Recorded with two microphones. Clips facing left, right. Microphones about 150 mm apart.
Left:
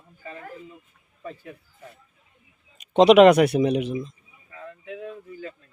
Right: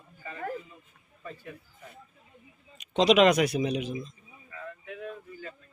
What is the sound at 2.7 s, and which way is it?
Speech, 50° left (ahead or behind).